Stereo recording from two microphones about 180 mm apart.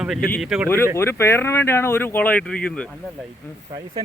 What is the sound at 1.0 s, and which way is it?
Speech, 15° left (ahead or behind).